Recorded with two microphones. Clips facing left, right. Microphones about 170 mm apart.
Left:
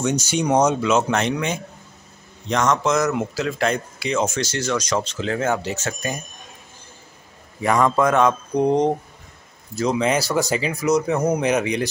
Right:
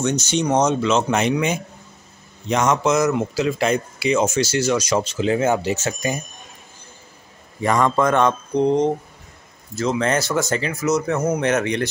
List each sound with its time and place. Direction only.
0.0 s speech: 10° left (ahead or behind)
1.1 s speech: 5° right (ahead or behind)
7.6 s a man's voice: 5° left (ahead or behind)
8.6 s speech: 15° left (ahead or behind)